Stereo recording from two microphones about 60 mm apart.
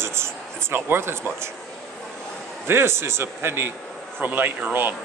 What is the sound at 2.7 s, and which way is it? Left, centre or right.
A man's voice, right.